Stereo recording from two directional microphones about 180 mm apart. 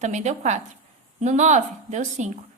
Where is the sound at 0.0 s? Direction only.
40° right (ahead or behind).